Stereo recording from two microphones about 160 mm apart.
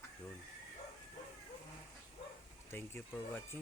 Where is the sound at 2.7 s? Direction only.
15° left (ahead or behind).